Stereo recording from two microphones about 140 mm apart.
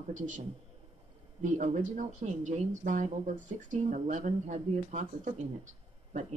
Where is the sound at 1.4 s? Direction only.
65° right (ahead or behind).